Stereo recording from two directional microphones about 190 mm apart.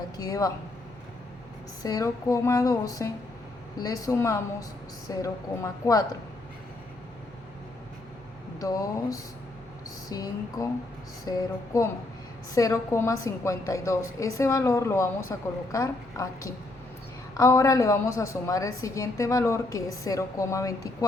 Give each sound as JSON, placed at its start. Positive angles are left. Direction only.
{"t": 0.2, "sound": "speech", "side_deg": 20}
{"t": 1.8, "sound": "a woman's voice", "side_deg": 20}
{"t": 8.5, "sound": "a woman's voice", "side_deg": 20}